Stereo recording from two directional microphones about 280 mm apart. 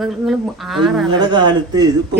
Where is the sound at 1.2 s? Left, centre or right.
Centre.